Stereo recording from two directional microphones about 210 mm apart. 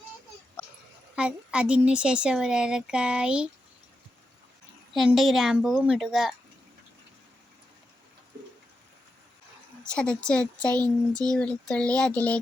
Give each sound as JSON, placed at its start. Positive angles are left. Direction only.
{"t": 1.1, "sound": "speech", "side_deg": -5}
{"t": 4.9, "sound": "speech", "side_deg": 0}
{"t": 9.8, "sound": "speech", "side_deg": 5}